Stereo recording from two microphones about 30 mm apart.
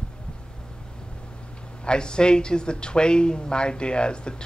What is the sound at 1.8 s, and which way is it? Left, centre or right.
Speech, left.